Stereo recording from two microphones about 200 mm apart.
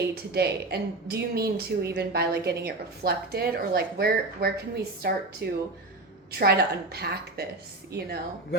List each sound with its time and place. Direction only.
0.1 s a woman's voice: 55° right (ahead or behind)